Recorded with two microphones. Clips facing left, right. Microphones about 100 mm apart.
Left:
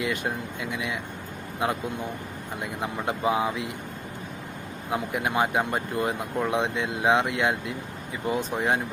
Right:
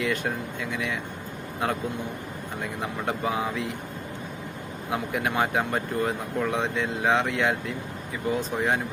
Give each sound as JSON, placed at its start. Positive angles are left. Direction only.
{"t": 0.0, "sound": "speech", "side_deg": 15}
{"t": 2.6, "sound": "speech", "side_deg": 10}
{"t": 4.9, "sound": "speech", "side_deg": 5}